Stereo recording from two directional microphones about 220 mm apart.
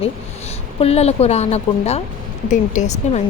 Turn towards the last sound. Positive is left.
turn(degrees=30)  # may be behind; listen again after turning